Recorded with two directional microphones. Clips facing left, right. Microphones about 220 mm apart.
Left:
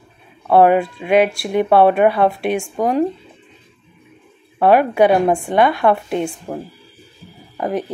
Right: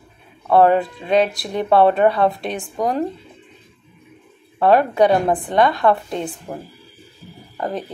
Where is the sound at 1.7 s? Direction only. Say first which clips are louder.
Left 1 dB; 25° left (ahead or behind).